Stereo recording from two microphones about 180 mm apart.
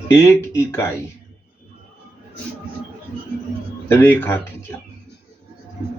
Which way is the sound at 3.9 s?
10° left (ahead or behind).